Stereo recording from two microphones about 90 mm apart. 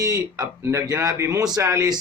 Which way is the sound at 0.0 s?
35° right (ahead or behind).